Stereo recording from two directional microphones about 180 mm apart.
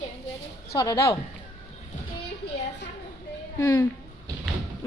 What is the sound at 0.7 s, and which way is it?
Speech, 20° left (ahead or behind).